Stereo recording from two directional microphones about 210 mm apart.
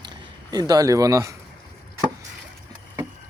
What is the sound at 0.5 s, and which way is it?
Speech, 20° right (ahead or behind).